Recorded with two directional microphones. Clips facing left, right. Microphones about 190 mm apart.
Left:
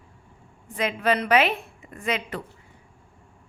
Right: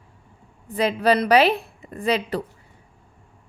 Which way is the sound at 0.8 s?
35° right (ahead or behind).